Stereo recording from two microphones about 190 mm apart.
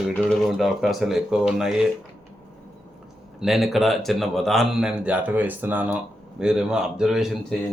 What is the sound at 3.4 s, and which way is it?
Speech, centre (ahead or behind).